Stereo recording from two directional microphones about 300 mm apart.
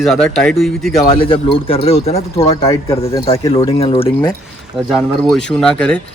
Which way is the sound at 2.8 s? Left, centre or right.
Centre.